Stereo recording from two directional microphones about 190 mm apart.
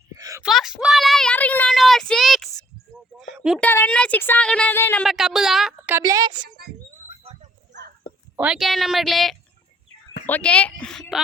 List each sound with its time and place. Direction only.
0.2 s a sound: 20° right (ahead or behind)
0.4 s child singing: centre (ahead or behind)
3.2 s a sound: centre (ahead or behind)
3.6 s speech: 10° left (ahead or behind)
5.0 s speech: centre (ahead or behind)
6.0 s a woman's voice: 20° right (ahead or behind)
8.4 s speech: 5° right (ahead or behind)